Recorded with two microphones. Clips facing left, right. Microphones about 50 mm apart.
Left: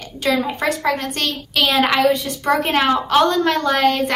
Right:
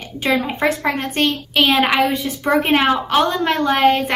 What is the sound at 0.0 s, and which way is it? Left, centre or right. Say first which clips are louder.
A woman's voice: even; right.